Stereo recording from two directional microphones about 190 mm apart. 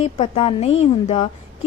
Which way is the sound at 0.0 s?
30° left (ahead or behind).